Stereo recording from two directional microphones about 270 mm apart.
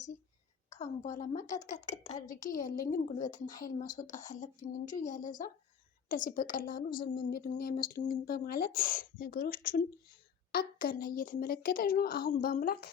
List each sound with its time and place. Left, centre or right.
0.7 s a woman's voice: left